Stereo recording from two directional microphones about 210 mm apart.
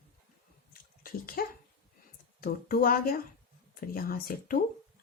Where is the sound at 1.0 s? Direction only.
45° left (ahead or behind).